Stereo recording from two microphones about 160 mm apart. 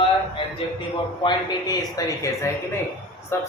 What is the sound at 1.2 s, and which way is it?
A man's voice, 25° left (ahead or behind).